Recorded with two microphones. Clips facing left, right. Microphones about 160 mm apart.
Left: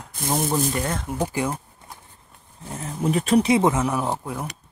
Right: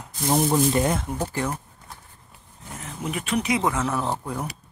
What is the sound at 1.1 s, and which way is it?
Speech, 10° left (ahead or behind).